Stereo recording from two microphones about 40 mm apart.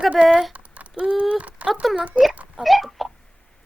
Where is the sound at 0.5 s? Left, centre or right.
Right.